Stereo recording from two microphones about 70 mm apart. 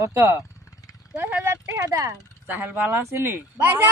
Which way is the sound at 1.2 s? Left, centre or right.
Right.